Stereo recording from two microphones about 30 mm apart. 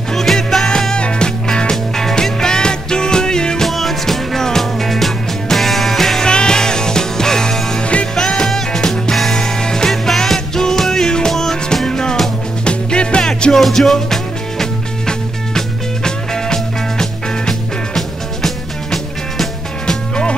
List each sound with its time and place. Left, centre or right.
0.1 s music: centre
0.9 s music: left
3.6 s music: centre
6.2 s music: left
7.8 s music: left
8.2 s music: left
9.1 s music: centre
9.4 s music: left
9.8 s music: centre
12.6 s music: left
13.5 s music: centre
15.0 s music: left